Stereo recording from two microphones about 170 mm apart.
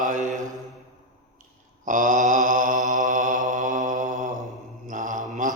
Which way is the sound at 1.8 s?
50° right (ahead or behind).